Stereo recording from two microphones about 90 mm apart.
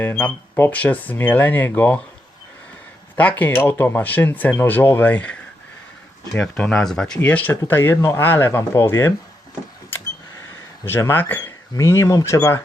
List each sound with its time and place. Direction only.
0.0 s speech: 20° left (ahead or behind)
3.2 s speech: 20° left (ahead or behind)
3.5 s speech: 30° left (ahead or behind); by 7.2 s 10° left (ahead or behind)
7.2 s speech: 20° left (ahead or behind)
10.8 s speech: 25° left (ahead or behind)